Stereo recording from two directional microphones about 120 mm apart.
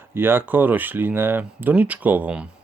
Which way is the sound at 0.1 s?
20° right (ahead or behind).